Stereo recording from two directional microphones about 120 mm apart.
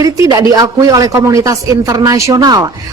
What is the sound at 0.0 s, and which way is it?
A woman's voice, 30° right (ahead or behind).